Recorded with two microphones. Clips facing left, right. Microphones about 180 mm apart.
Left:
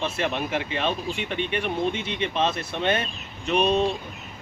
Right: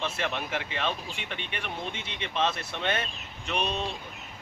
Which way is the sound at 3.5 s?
55° left (ahead or behind).